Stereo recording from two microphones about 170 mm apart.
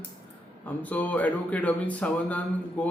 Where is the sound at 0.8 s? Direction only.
10° left (ahead or behind).